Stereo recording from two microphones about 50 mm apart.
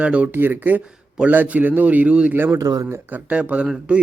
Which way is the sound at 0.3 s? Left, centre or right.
Right.